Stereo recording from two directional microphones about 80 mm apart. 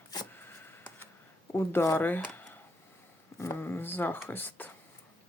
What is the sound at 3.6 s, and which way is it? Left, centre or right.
Speech, left.